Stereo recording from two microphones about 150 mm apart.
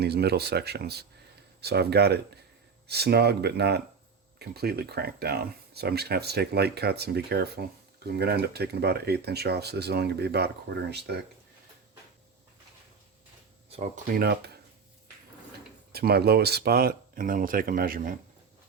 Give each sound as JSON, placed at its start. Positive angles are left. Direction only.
{"t": 0.0, "sound": "speech", "side_deg": -90}
{"t": 13.7, "sound": "speech", "side_deg": -45}
{"t": 14.1, "sound": "speech", "side_deg": -90}
{"t": 15.9, "sound": "speech", "side_deg": -90}